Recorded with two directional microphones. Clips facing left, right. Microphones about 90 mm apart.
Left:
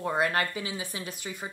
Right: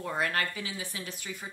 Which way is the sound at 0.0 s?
20° left (ahead or behind).